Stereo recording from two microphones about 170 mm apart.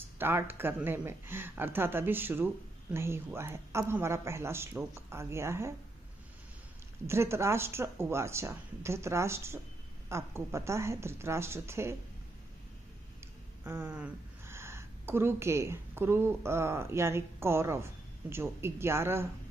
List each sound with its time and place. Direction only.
0.2 s speech: 15° right (ahead or behind)
7.1 s speech: 15° right (ahead or behind)
13.7 s a woman's voice: 10° right (ahead or behind)